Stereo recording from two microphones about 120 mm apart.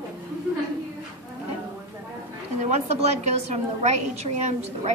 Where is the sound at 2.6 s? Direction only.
65° right (ahead or behind).